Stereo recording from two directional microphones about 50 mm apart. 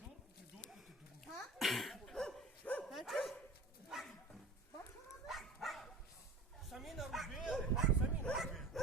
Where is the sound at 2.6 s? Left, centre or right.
Left.